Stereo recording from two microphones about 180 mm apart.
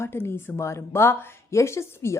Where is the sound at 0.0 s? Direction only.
15° left (ahead or behind).